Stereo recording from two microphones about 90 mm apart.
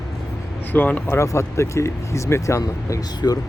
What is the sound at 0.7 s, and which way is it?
Speech, 20° left (ahead or behind).